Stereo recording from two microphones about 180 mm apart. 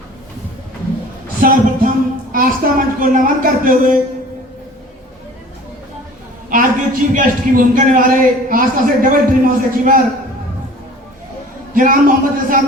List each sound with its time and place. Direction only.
1.4 s a woman's voice: 50° right (ahead or behind)
6.5 s a man's voice: 50° right (ahead or behind)
11.7 s a man's voice: 50° right (ahead or behind)